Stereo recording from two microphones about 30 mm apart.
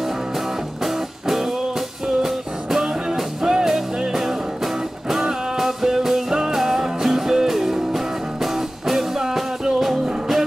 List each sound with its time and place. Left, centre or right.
0.8 s music: centre
2.8 s music: right
5.6 s music: centre